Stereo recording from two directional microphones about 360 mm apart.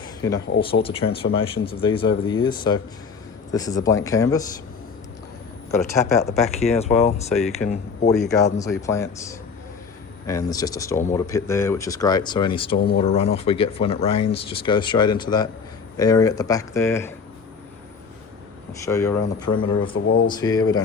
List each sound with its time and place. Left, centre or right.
0.2 s speech: centre
5.9 s speech: centre
8.1 s speech: centre
18.7 s speech: centre
19.8 s speech: left
20.2 s speech: centre